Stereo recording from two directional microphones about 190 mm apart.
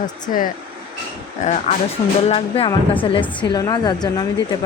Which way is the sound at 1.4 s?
40° left (ahead or behind).